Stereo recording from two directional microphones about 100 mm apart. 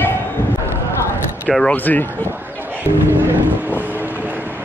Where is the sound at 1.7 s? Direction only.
15° left (ahead or behind).